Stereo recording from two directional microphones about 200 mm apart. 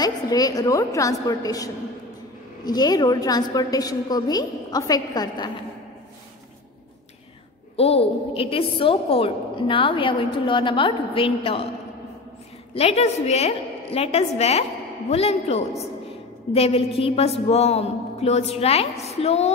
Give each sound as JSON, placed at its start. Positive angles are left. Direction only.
{"t": 0.0, "sound": "a woman's voice", "side_deg": 20}
{"t": 7.7, "sound": "a woman's voice", "side_deg": 30}
{"t": 12.7, "sound": "a woman's voice", "side_deg": 30}